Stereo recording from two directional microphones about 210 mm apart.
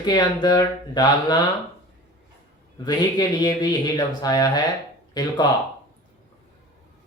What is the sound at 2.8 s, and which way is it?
Speech, 20° left (ahead or behind).